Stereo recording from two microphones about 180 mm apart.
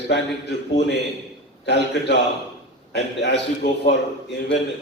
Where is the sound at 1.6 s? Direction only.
70° left (ahead or behind).